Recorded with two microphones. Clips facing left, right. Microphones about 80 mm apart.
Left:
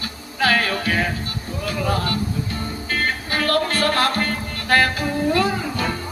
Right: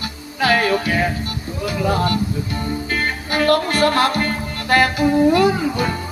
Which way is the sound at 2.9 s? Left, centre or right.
Right.